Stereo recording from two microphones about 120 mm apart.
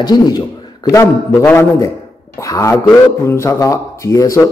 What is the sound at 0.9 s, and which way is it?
Speech, 25° left (ahead or behind).